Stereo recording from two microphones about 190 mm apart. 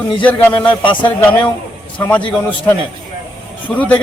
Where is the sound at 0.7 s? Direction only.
25° left (ahead or behind).